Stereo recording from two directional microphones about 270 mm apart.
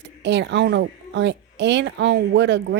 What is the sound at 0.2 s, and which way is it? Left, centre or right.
Speech, right.